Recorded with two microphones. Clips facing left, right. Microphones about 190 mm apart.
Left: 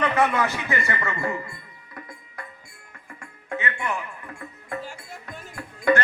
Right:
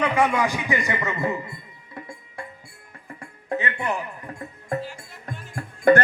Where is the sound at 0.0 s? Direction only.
10° right (ahead or behind); by 4.8 s 35° right (ahead or behind).